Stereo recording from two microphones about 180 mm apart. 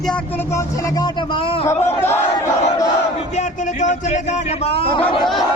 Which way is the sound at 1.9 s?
10° left (ahead or behind).